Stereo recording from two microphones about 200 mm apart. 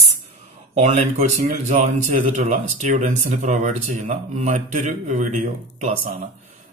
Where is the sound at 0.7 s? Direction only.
35° right (ahead or behind).